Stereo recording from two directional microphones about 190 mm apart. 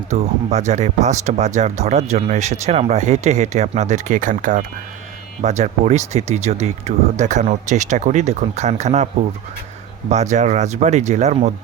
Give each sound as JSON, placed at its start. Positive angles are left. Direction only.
{"t": 0.1, "sound": "speech", "side_deg": -35}
{"t": 10.1, "sound": "speech", "side_deg": -35}